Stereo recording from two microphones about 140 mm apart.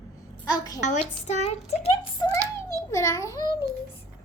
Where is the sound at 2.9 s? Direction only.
20° left (ahead or behind).